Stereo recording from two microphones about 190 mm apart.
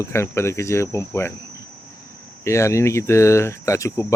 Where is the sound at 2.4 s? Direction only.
15° left (ahead or behind).